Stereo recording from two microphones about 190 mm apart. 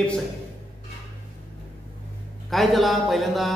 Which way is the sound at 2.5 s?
Centre (ahead or behind).